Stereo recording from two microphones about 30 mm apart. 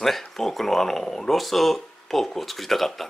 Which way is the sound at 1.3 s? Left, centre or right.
Centre.